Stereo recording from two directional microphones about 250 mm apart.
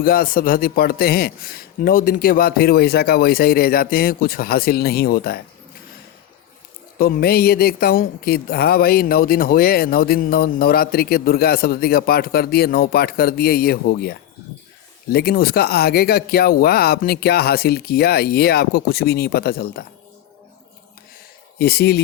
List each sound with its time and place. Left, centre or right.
0.0 s speech: left
7.0 s speech: left
21.6 s speech: left